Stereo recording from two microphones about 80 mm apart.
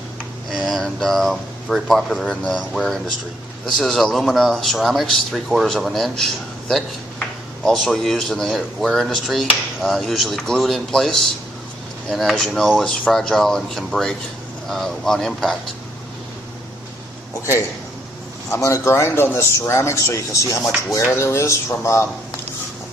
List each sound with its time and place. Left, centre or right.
0.5 s speech: centre
17.4 s speech: left